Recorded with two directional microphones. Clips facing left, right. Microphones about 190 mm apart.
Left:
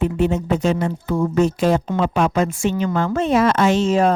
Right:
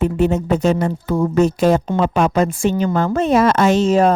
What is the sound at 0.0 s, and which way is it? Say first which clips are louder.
A woman's voice: right 2 dB; 45° right (ahead or behind).